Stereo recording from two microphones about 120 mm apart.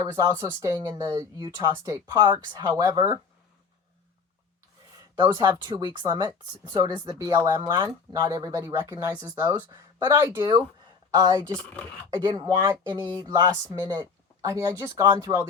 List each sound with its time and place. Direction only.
0.0 s speech: 25° right (ahead or behind)
5.2 s speech: 25° right (ahead or behind)
7.0 s speech: 30° right (ahead or behind)